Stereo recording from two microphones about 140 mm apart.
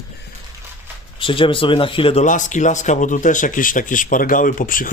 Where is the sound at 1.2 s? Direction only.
40° left (ahead or behind).